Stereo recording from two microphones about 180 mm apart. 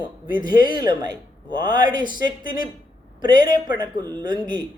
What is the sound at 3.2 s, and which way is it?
Speech, 25° right (ahead or behind).